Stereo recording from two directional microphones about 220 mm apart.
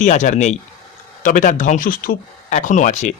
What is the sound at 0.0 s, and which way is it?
Speech, 35° left (ahead or behind).